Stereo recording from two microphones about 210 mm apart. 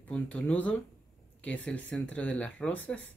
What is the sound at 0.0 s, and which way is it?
Speech, 5° left (ahead or behind).